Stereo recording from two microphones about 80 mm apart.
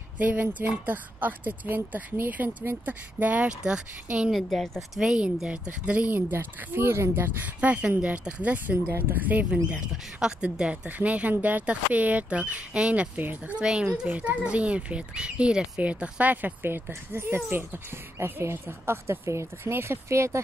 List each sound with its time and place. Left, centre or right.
0.2 s speech: right
4.4 s a woman's voice: centre
5.0 s speech: centre
6.3 s speech: right; by 15.8 s centre
15.8 s speech: centre; by 20.3 s right